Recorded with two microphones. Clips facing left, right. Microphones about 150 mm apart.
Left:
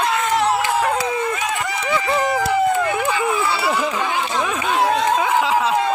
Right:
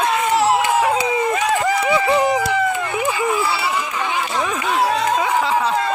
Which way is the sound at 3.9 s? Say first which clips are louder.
Even; centre (ahead or behind).